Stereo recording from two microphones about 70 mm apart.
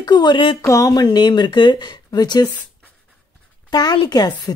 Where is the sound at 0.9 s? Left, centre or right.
Left.